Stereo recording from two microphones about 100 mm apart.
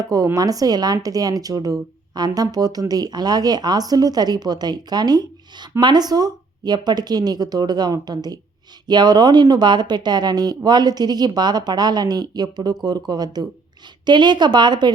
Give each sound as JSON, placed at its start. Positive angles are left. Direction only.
{"t": 0.0, "sound": "speech", "side_deg": -40}